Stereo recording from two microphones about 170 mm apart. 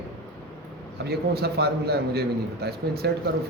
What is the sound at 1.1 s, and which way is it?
A man's voice, 70° right (ahead or behind).